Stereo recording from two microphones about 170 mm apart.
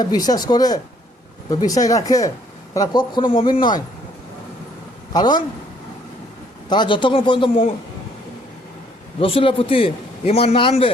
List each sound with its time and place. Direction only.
0.0 s speech: 25° left (ahead or behind)
5.1 s speech: 25° left (ahead or behind)
6.7 s speech: 25° left (ahead or behind)
9.1 s a man's voice: 35° left (ahead or behind)